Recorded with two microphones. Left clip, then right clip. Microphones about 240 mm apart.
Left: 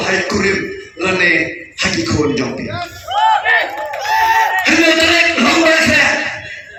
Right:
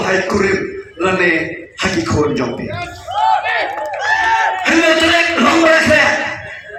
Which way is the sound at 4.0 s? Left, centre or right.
Right.